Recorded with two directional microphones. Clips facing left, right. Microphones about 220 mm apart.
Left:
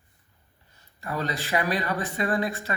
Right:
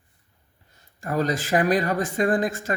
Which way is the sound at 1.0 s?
45° right (ahead or behind).